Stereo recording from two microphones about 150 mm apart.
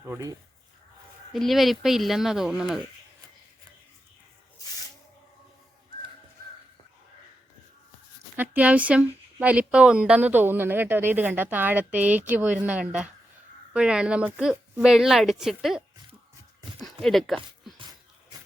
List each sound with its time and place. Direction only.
0.0 s speech: 20° right (ahead or behind)
1.3 s speech: centre (ahead or behind)
8.4 s speech: 10° right (ahead or behind)
16.8 s speech: centre (ahead or behind)